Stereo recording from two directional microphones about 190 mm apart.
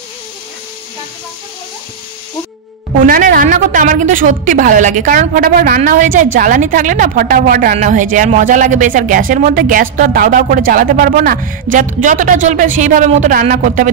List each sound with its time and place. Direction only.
3.0 s a woman's voice: 50° right (ahead or behind)